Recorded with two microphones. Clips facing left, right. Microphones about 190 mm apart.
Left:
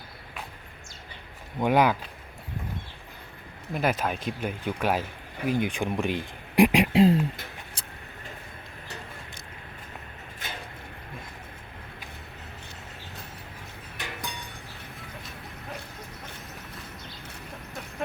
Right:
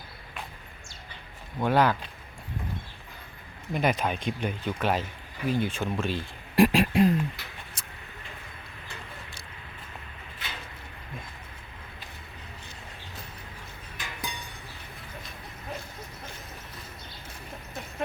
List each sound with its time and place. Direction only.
1.5 s speech: 10° left (ahead or behind)
3.7 s speech: 5° left (ahead or behind); by 7.1 s 20° left (ahead or behind)
7.8 s vehicle: 30° left (ahead or behind)
10.4 s a sound: 45° left (ahead or behind)
14.0 s music: 65° left (ahead or behind)